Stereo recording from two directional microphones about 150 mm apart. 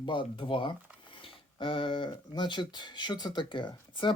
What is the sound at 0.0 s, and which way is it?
Speech, 35° left (ahead or behind).